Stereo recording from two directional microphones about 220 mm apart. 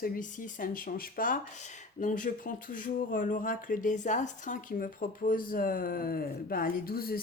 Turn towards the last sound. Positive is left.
turn(degrees=45)  # may be behind; listen again after turning